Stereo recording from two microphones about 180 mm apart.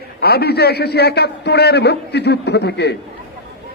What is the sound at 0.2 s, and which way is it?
A man's voice, 60° left (ahead or behind).